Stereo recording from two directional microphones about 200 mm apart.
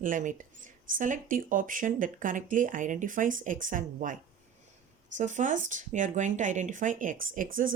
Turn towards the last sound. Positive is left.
turn(degrees=-45)  # may be behind; listen again after turning